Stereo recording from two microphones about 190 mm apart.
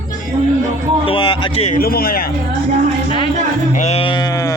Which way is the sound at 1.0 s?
25° left (ahead or behind).